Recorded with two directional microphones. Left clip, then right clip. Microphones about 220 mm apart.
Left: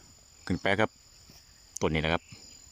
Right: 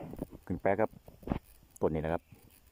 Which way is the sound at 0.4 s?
5° left (ahead or behind).